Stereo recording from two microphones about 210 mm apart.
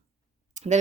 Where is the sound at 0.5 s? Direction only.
35° right (ahead or behind).